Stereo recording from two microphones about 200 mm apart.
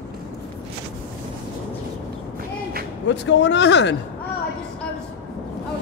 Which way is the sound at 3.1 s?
60° left (ahead or behind).